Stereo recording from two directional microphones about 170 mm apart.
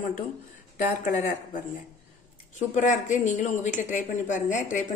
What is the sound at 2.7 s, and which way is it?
A woman's voice, 45° left (ahead or behind).